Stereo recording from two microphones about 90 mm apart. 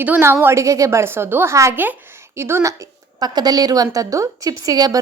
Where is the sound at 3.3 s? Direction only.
45° right (ahead or behind).